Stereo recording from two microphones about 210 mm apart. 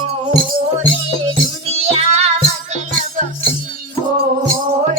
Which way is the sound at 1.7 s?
30° right (ahead or behind).